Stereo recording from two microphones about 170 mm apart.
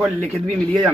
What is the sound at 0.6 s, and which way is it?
Speech, 5° left (ahead or behind).